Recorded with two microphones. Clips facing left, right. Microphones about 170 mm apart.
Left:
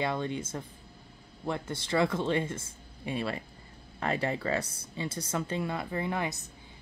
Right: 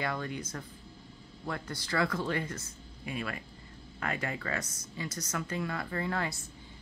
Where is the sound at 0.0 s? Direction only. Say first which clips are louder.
Left 4 dB; 25° left (ahead or behind).